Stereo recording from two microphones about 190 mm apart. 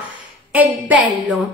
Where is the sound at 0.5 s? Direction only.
10° right (ahead or behind).